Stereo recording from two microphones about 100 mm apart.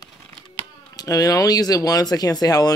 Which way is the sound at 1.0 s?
35° left (ahead or behind).